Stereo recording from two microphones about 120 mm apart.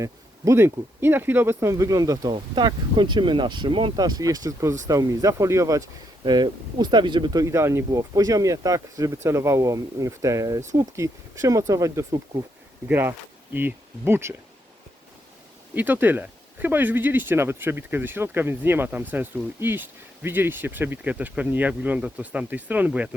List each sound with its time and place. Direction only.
0.0 s speech: 25° right (ahead or behind)
2.3 s speech: 40° right (ahead or behind)
7.4 s speech: 25° right (ahead or behind)
12.9 s speech: 15° right (ahead or behind)
15.7 s speech: 15° right (ahead or behind)